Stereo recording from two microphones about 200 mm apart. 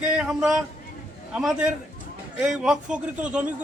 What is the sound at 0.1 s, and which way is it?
A man's voice, 5° right (ahead or behind).